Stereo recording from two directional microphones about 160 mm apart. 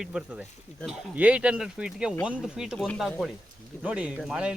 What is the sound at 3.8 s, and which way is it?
Speech, 10° right (ahead or behind).